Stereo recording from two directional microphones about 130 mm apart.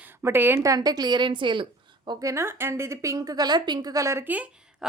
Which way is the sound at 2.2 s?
20° right (ahead or behind).